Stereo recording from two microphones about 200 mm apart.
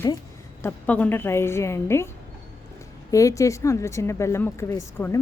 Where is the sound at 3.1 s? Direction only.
15° left (ahead or behind).